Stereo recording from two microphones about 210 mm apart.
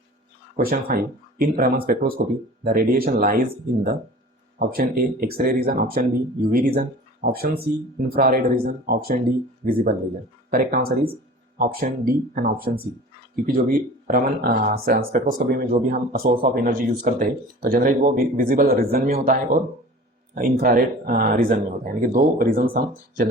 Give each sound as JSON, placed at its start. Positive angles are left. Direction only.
{"t": 0.5, "sound": "speech", "side_deg": -45}
{"t": 4.7, "sound": "speech", "side_deg": -45}
{"t": 10.5, "sound": "speech", "side_deg": -45}